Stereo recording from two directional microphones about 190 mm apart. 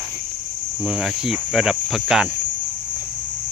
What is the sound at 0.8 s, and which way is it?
Speech, 5° right (ahead or behind).